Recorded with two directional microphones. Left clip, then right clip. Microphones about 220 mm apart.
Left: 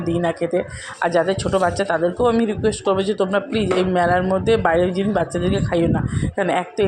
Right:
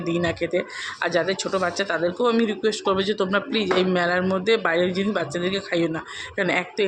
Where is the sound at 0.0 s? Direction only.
10° left (ahead or behind).